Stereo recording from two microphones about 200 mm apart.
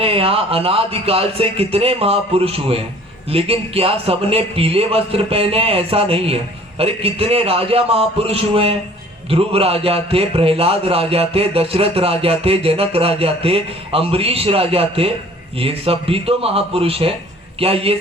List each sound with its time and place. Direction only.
0.0 s speech: 30° right (ahead or behind)